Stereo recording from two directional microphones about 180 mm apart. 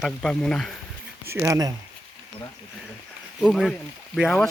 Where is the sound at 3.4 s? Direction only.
Centre (ahead or behind).